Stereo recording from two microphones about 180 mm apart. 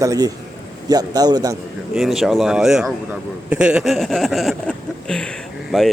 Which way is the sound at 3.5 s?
5° right (ahead or behind).